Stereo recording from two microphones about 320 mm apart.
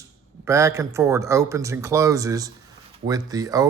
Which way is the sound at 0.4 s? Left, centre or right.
Centre.